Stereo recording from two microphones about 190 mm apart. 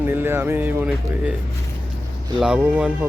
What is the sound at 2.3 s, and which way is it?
Speech, 5° right (ahead or behind).